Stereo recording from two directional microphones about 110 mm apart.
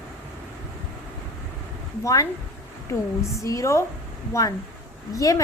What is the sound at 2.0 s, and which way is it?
Speech, 30° left (ahead or behind).